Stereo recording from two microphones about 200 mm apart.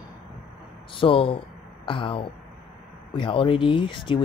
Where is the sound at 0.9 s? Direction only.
25° left (ahead or behind).